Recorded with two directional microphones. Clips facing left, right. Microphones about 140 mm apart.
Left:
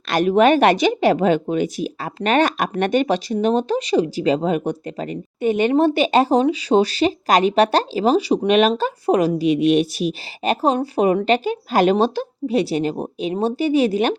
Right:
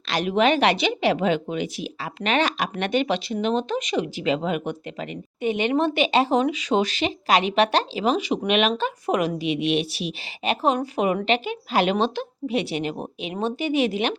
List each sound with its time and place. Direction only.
0.1 s speech: 45° left (ahead or behind)